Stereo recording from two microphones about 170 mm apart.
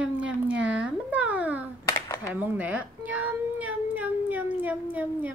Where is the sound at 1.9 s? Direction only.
20° left (ahead or behind).